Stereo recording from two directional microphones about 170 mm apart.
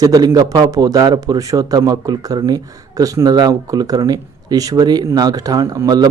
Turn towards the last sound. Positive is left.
turn(degrees=-20)  # may be behind; listen again after turning